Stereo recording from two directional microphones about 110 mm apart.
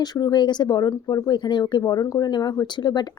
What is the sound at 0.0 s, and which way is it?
Speech, 35° left (ahead or behind).